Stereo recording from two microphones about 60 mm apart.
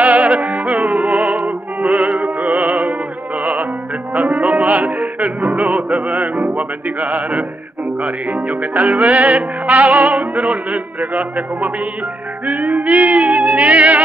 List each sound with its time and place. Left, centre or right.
0.0 s music: right